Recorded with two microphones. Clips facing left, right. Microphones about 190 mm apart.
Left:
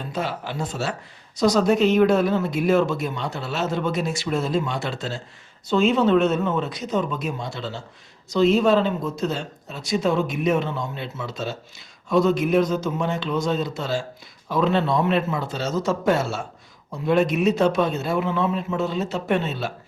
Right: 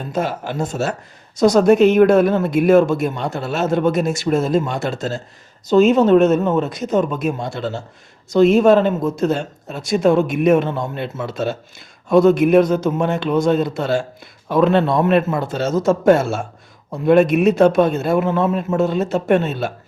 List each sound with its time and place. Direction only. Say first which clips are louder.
0.1 s a man's voice: right 7 dB; 45° right (ahead or behind)